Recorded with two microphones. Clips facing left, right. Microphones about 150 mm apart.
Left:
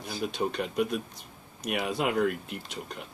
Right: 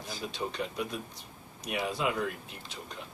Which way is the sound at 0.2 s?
60° left (ahead or behind).